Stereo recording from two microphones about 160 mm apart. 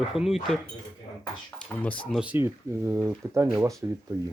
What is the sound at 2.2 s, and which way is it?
Speech, 10° right (ahead or behind).